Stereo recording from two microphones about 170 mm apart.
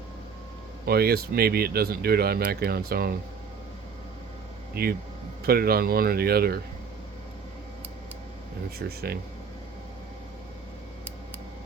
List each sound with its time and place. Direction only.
0.9 s speech: 65° right (ahead or behind)
4.7 s speech: 65° right (ahead or behind)
8.8 s speech: 65° right (ahead or behind)